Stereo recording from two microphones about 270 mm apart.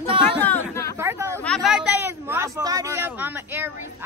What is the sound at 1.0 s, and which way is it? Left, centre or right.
Speech, centre.